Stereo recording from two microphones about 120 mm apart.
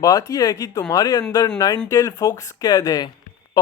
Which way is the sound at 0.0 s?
30° left (ahead or behind).